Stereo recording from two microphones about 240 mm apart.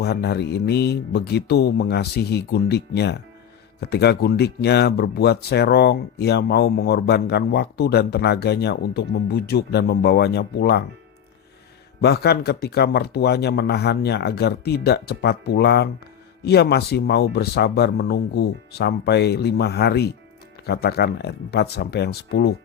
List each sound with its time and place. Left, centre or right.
0.0 s speech: left
11.9 s speech: left